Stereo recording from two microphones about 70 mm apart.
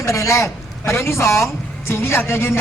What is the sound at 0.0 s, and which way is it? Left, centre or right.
A man's voice, left.